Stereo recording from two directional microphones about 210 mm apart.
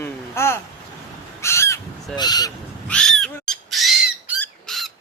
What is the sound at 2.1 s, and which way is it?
Speech, 20° left (ahead or behind).